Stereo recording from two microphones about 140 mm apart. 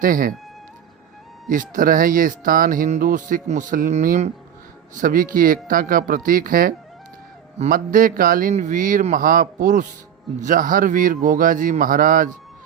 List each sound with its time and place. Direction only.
0.0 s speech: 85° right
1.5 s speech: 75° right (ahead or behind)
4.9 s speech: 80° right
8.5 s speech: 65° right (ahead or behind)